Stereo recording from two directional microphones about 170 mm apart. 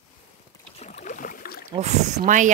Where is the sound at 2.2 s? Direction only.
50° right (ahead or behind).